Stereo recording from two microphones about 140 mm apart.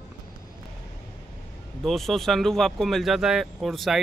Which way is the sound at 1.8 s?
Centre (ahead or behind).